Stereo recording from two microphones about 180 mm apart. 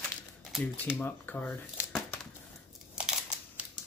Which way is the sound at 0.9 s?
10° left (ahead or behind).